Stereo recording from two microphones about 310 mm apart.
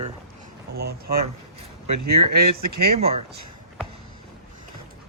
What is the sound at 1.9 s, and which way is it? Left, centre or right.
Speech, right.